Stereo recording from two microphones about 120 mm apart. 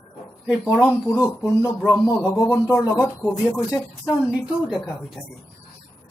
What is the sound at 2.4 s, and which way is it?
Speech, 25° left (ahead or behind).